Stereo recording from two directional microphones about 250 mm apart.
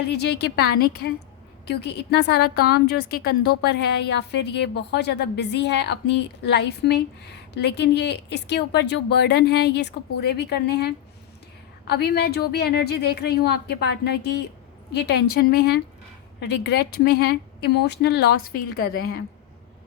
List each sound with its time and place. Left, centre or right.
0.1 s a woman's voice: left